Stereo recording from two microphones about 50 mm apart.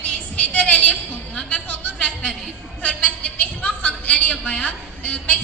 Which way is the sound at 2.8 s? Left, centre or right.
Left.